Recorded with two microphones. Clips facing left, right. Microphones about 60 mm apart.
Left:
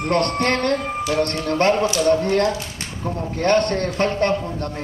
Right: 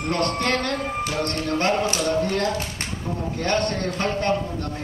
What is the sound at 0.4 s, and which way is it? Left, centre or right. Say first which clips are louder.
A man's voice: left 4 dB; left.